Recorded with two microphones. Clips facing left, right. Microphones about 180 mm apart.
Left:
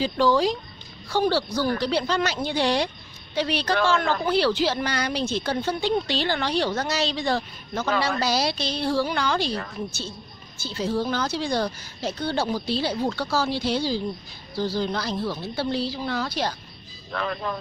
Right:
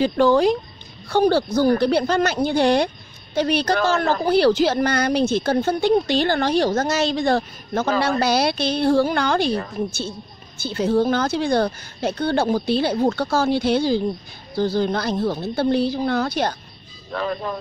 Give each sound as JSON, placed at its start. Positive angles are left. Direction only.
{"t": 0.0, "sound": "a woman's voice", "side_deg": -55}
{"t": 17.1, "sound": "speech", "side_deg": -35}